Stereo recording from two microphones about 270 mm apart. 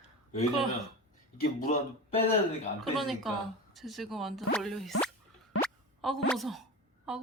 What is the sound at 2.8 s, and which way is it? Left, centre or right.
Speech, centre.